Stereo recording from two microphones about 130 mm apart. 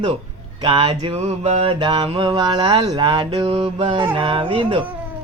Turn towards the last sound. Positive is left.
turn(degrees=-40)  # may be behind; listen again after turning